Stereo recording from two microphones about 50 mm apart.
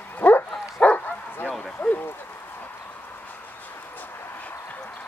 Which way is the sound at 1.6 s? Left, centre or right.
Left.